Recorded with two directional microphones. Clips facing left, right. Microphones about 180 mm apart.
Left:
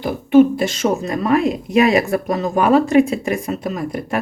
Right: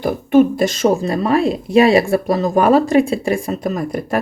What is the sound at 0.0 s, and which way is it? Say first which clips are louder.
Speech: left 1 dB; 45° right (ahead or behind).